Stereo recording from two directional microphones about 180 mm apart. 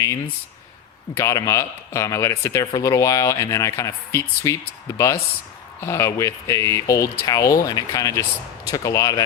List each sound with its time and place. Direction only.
1.1 s speech: 15° left (ahead or behind)